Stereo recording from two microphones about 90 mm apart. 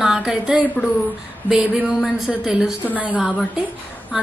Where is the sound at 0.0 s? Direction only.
5° right (ahead or behind).